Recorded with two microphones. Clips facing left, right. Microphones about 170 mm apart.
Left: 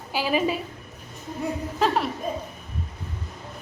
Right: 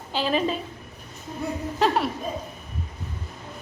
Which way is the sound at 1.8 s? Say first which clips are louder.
Right 1 dB; centre (ahead or behind).